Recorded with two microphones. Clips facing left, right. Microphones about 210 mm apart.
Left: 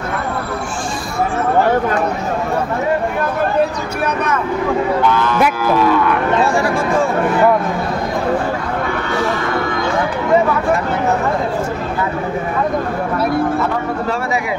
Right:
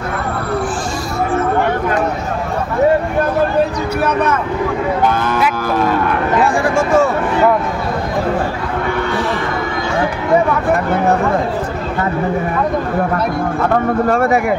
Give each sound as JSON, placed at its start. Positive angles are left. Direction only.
{"t": 5.0, "sound": "music", "side_deg": -50}
{"t": 6.5, "sound": "speech", "side_deg": -50}
{"t": 14.0, "sound": "speech", "side_deg": -55}